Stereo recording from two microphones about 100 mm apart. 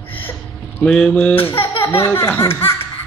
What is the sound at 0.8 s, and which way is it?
Speech, 10° left (ahead or behind).